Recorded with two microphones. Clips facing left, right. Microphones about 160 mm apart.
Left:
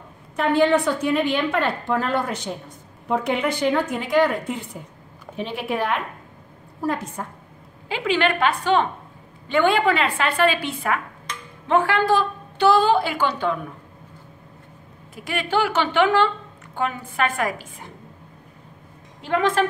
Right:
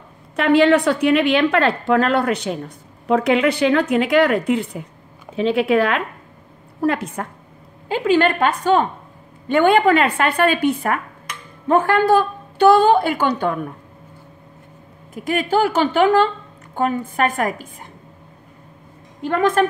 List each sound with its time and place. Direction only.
0.4 s a woman's voice: 75° right (ahead or behind); by 6.0 s 90° right
6.8 s a woman's voice: 70° right (ahead or behind)
7.9 s a woman's voice: 45° right (ahead or behind)
15.2 s a woman's voice: 45° right (ahead or behind)
19.2 s a woman's voice: 50° right (ahead or behind)